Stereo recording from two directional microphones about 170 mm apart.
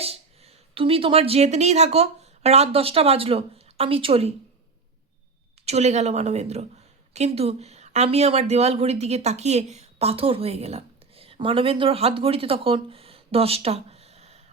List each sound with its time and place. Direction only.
0.0 s speech: 35° right (ahead or behind)
5.6 s a woman's voice: 40° right (ahead or behind)